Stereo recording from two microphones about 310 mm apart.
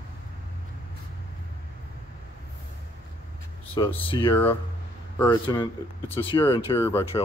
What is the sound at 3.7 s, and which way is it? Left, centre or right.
Speech, centre.